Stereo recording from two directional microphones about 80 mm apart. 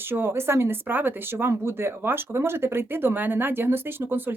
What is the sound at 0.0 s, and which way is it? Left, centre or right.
Speech, right.